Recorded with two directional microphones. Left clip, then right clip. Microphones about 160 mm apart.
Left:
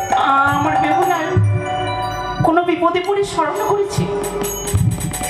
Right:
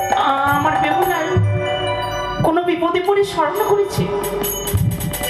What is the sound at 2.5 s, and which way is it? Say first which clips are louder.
Speech: left 2 dB; 30° right (ahead or behind).